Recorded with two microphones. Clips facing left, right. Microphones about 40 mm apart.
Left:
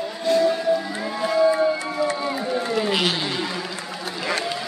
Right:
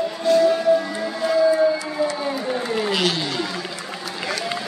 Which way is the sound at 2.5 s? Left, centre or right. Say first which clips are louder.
Left 2 dB; centre.